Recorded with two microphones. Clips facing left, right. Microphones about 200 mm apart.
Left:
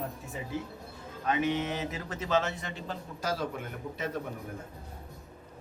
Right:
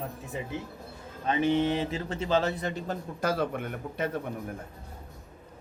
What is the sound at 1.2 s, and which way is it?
Speech, 30° right (ahead or behind).